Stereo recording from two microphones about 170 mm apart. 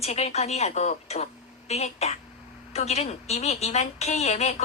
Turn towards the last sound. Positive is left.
turn(degrees=40)  # may be behind; listen again after turning